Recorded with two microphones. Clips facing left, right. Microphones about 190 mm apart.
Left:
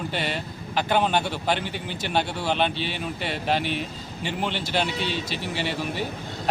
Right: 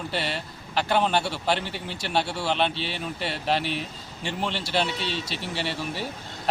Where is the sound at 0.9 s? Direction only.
Centre (ahead or behind).